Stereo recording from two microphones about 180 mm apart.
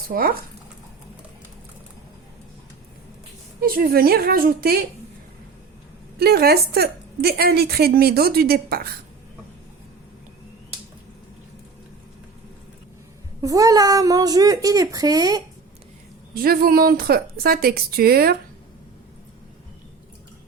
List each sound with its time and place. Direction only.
0.1 s speech: 55° right (ahead or behind)
3.6 s a woman's voice: 55° right (ahead or behind)
6.1 s a woman's voice: 60° right (ahead or behind)
13.4 s a woman's voice: 20° right (ahead or behind)
16.3 s a woman's voice: 55° right (ahead or behind)